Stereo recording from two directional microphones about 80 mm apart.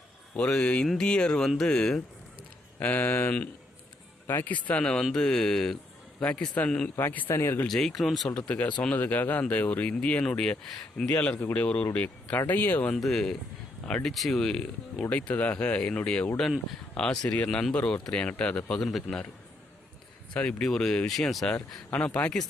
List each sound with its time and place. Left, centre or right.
0.3 s speech: centre
2.7 s speech: left
7.3 s speech: left
7.7 s speech: centre
8.4 s speech: centre
13.0 s speech: centre
15.1 s speech: centre
20.3 s speech: centre
21.8 s speech: centre